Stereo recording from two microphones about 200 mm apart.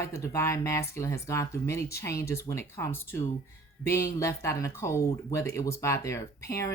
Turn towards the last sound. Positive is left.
turn(degrees=15)  # may be behind; listen again after turning